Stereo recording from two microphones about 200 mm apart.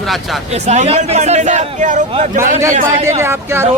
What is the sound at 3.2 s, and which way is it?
Speech, 10° right (ahead or behind).